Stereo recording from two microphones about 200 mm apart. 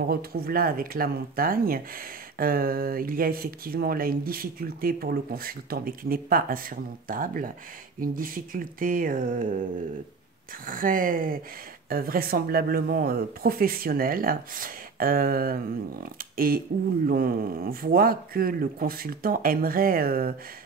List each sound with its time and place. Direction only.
0.1 s speech: 50° right (ahead or behind)
10.7 s speech: 45° right (ahead or behind)